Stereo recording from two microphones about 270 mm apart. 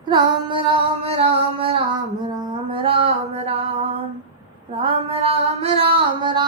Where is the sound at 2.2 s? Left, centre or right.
Centre.